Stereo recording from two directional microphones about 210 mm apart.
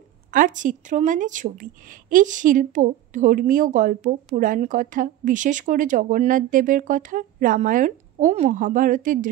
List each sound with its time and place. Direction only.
0.3 s a woman's voice: 40° right (ahead or behind)